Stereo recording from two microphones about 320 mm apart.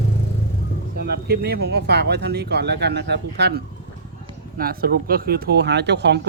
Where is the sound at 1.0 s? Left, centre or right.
Right.